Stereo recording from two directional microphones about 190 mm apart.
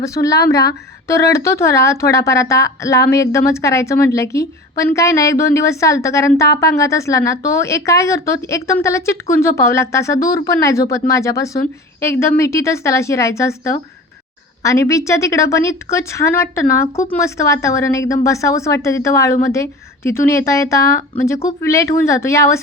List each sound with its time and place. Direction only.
0.0 s a woman's voice: 15° left (ahead or behind)